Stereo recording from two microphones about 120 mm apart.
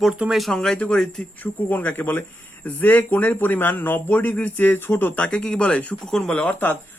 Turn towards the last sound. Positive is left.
turn(degrees=10)  # may be behind; listen again after turning